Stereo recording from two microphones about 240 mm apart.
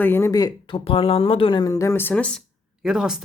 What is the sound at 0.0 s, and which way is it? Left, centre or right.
Speech, centre.